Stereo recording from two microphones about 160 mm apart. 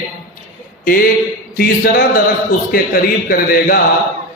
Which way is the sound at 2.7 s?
60° left (ahead or behind).